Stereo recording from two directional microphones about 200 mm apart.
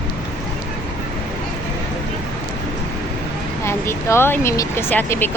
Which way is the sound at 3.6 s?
15° left (ahead or behind).